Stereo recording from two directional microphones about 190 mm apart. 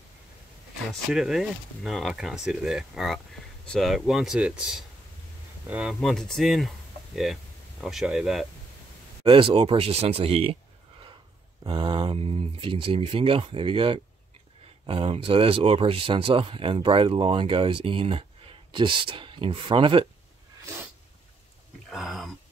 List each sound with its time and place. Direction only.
1.1 s speech: centre (ahead or behind)
7.8 s speech: centre (ahead or behind)
9.2 s speech: 30° right (ahead or behind)
11.6 s speech: 25° right (ahead or behind)
21.8 s a sound: centre (ahead or behind)